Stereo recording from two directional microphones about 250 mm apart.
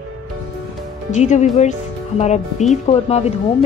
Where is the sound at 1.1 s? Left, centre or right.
Left.